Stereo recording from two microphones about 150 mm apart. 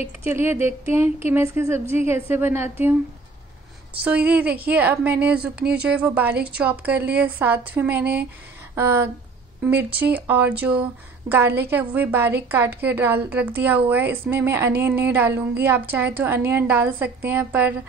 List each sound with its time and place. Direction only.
0.2 s a woman's voice: 15° right (ahead or behind)
4.0 s a woman's voice: 10° right (ahead or behind)